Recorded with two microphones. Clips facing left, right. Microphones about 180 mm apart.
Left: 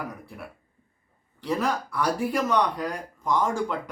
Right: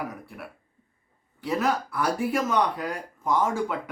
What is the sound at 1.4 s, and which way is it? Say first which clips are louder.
A man's voice: right 1 dB; 5° right (ahead or behind).